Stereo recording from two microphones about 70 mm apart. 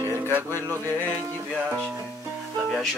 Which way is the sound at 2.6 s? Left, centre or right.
Centre.